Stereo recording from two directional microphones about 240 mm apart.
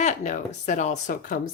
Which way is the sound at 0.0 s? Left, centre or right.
Left.